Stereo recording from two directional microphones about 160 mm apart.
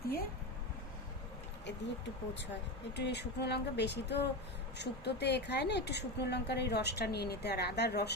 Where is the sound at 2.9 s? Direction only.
90° left.